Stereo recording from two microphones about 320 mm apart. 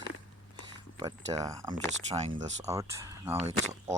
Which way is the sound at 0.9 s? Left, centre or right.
Centre.